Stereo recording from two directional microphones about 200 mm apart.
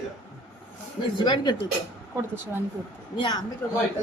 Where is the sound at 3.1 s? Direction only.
25° left (ahead or behind).